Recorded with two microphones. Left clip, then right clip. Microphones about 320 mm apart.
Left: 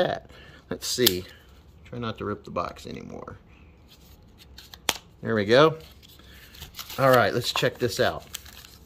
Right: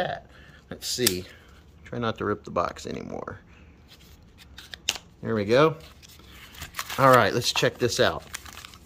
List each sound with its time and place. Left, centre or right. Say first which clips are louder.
0.0 s a sound: left 4 dB; left
0.7 s speech: left 3 dB; centre
1.9 s speech: right 4 dB; centre
4.6 s scissors: right 3 dB; centre
5.2 s speech: left 2 dB; centre
7.0 s speech: right 1 dB; centre